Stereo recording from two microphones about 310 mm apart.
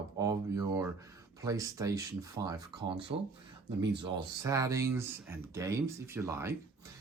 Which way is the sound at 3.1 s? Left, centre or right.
Right.